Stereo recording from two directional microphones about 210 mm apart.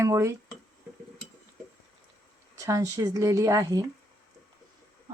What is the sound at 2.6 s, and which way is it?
Speech, 15° right (ahead or behind).